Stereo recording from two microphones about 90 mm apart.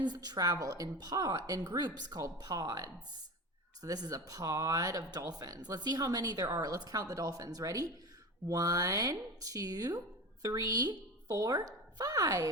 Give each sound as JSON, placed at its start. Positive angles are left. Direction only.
{"t": 0.0, "sound": "a woman's voice", "side_deg": -50}